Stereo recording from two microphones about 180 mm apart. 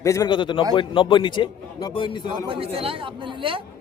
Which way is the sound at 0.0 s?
20° left (ahead or behind).